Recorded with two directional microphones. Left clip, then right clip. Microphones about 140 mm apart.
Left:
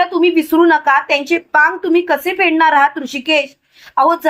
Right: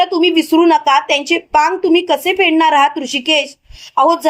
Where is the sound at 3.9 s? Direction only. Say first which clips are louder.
Right 1 dB; 35° right (ahead or behind).